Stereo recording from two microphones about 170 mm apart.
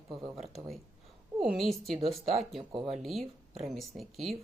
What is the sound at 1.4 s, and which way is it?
Speech, centre (ahead or behind).